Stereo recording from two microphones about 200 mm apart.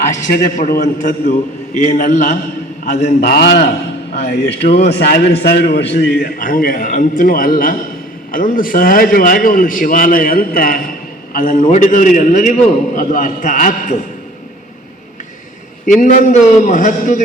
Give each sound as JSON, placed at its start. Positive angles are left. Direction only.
{"t": 0.1, "sound": "a man's voice", "side_deg": 40}
{"t": 3.2, "sound": "a man's voice", "side_deg": 50}
{"t": 15.9, "sound": "a man's voice", "side_deg": 40}